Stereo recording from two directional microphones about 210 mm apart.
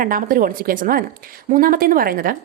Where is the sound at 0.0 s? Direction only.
40° right (ahead or behind).